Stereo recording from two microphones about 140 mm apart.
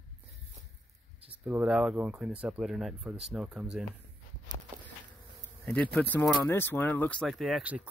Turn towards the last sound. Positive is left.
turn(degrees=0)  # may be behind; listen again after turning